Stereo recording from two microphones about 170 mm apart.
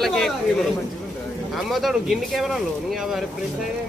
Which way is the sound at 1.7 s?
Centre (ahead or behind).